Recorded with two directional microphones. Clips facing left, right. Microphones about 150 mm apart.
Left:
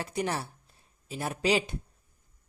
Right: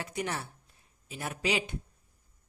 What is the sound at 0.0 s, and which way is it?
A man's voice, 35° left (ahead or behind).